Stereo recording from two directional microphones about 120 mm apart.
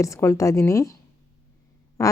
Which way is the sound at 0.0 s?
25° left (ahead or behind).